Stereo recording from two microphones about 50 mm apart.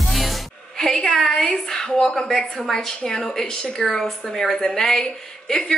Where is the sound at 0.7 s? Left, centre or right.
Centre.